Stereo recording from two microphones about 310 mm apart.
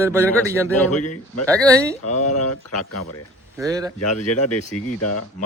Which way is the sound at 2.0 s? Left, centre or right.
Left.